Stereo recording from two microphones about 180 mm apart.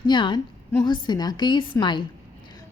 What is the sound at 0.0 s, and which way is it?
A woman's voice, 25° left (ahead or behind).